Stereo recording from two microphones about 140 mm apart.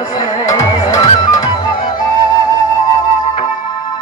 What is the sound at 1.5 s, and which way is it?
Music, 35° left (ahead or behind).